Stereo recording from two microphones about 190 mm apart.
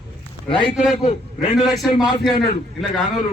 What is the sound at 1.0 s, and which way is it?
Speech, 35° left (ahead or behind).